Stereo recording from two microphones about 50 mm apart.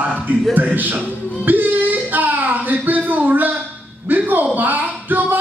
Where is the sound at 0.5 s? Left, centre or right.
Right.